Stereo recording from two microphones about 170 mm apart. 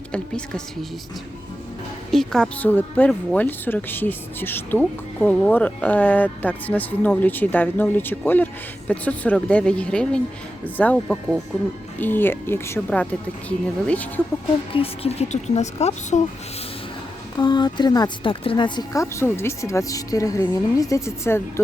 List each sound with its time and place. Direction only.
0.1 s a woman's voice: 5° left (ahead or behind)
2.0 s a woman's voice: centre (ahead or behind)
14.7 s speech: 35° left (ahead or behind)
17.3 s speech: 25° left (ahead or behind)